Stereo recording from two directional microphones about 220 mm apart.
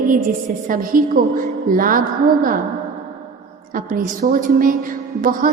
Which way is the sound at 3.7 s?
40° right (ahead or behind).